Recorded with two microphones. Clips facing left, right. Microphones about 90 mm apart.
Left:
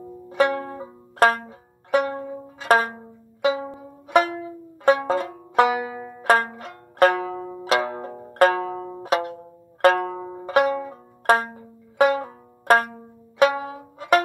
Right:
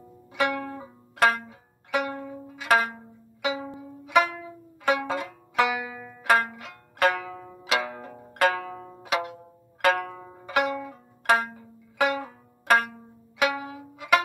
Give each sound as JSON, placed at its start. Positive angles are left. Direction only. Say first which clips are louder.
{"t": 0.3, "sound": "music", "louder": "left 5 dB", "side_deg": 35}
{"t": 4.8, "sound": "banjo", "louder": "left 6 dB", "side_deg": 40}
{"t": 6.2, "sound": "music", "louder": "left 3 dB", "side_deg": 35}